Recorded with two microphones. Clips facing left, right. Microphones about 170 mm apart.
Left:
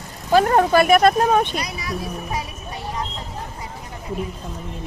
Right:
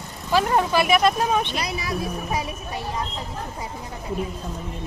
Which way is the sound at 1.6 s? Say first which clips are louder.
Right 1 dB; 25° right (ahead or behind).